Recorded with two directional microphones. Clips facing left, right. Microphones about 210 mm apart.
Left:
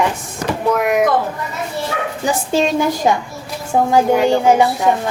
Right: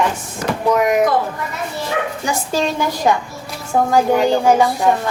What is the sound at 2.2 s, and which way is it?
A woman's voice, 20° left (ahead or behind).